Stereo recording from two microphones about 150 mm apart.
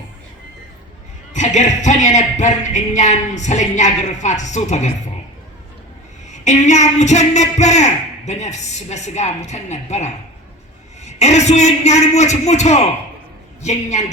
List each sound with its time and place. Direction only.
1.3 s speech: 55° left (ahead or behind)
6.3 s speech: 50° left (ahead or behind)